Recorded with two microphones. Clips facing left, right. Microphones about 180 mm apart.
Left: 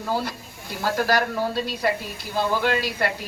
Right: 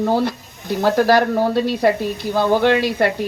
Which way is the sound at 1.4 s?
55° right (ahead or behind).